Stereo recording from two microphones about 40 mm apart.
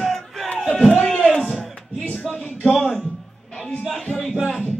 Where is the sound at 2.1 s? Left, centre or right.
Left.